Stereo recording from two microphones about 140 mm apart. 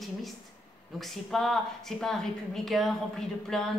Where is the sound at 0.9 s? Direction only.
5° left (ahead or behind).